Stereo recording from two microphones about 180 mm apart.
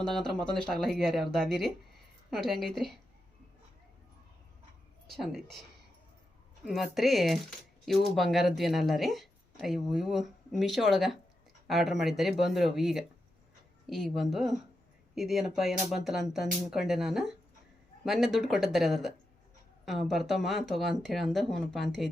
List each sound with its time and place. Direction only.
0.0 s speech: 5° left (ahead or behind)
5.0 s speech: centre (ahead or behind)
6.7 s speech: centre (ahead or behind)